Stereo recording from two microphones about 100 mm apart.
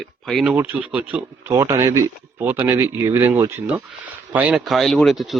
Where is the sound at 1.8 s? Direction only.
30° right (ahead or behind); by 4.6 s 15° right (ahead or behind).